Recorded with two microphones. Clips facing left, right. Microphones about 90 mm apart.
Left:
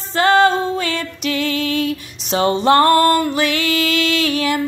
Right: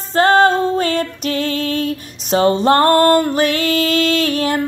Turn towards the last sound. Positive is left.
turn(degrees=-45)  # may be behind; listen again after turning